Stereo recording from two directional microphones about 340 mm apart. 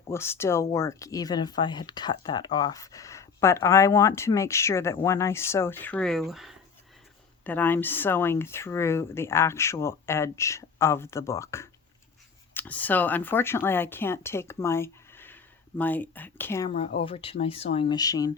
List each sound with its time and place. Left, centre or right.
0.1 s speech: centre